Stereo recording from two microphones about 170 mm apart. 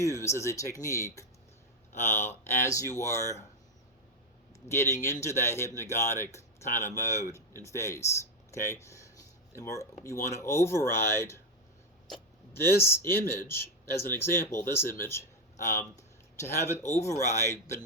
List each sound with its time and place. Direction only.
0.0 s speech: 15° left (ahead or behind)
4.7 s speech: 15° left (ahead or behind)
12.6 s speech: 15° left (ahead or behind)